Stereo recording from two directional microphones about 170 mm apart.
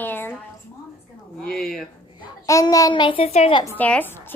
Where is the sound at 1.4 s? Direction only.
5° left (ahead or behind).